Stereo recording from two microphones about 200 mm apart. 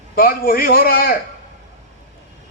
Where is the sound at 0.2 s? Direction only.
45° left (ahead or behind).